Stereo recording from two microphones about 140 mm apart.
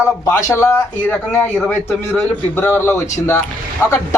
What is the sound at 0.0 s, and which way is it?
A man's voice, 20° left (ahead or behind).